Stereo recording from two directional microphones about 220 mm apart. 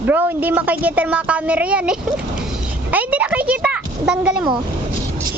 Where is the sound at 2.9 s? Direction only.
5° right (ahead or behind).